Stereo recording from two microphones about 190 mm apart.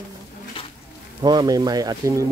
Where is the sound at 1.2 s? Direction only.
20° right (ahead or behind).